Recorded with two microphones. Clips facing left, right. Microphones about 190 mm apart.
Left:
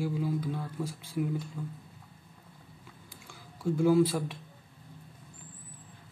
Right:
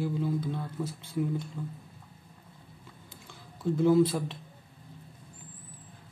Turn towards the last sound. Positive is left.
turn(degrees=10)  # may be behind; listen again after turning